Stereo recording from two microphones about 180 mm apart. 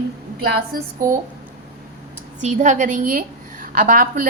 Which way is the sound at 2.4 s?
45° right (ahead or behind).